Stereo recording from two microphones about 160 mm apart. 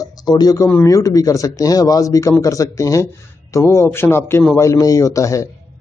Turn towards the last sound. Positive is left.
turn(degrees=20)  # may be behind; listen again after turning